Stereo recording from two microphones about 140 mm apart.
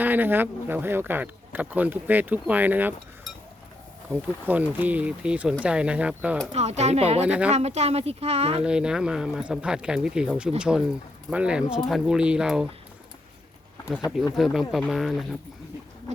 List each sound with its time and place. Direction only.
0.0 s speech: 15° right (ahead or behind)
4.4 s speech: 10° right (ahead or behind)
6.5 s speech: 50° right (ahead or behind)
7.3 s speech: 10° right (ahead or behind)
7.5 s speech: 50° right (ahead or behind)
8.6 s speech: 5° right (ahead or behind)
13.9 s speech: 5° right (ahead or behind)